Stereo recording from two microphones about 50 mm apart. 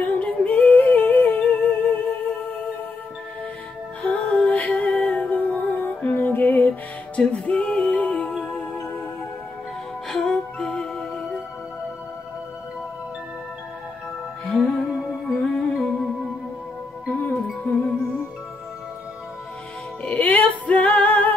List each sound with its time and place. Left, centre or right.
0.0 s yodeling: left
4.0 s music: left
7.2 s music: left
10.0 s music: centre
14.4 s music: centre
17.0 s music: left
20.1 s female singing: left